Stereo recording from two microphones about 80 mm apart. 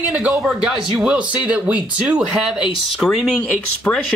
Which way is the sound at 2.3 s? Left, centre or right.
Centre.